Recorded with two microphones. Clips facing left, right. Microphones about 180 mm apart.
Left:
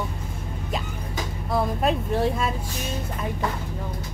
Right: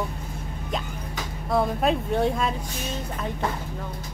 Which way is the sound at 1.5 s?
Centre (ahead or behind).